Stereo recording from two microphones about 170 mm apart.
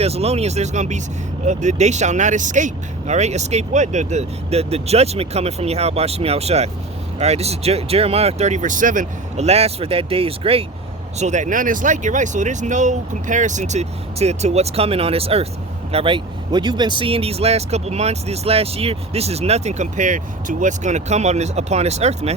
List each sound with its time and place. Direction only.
0.0 s speech: 35° right (ahead or behind)
11.2 s speech: 45° right (ahead or behind)